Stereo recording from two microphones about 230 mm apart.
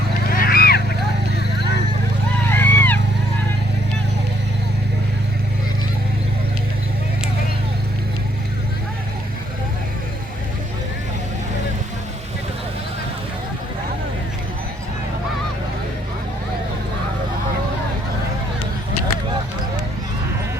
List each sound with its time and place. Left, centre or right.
0.3 s boat: left
1.4 s vehicle: left
2.5 s vehicle: centre